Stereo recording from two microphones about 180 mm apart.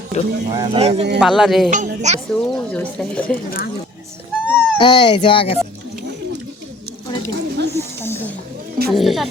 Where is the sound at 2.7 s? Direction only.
10° left (ahead or behind).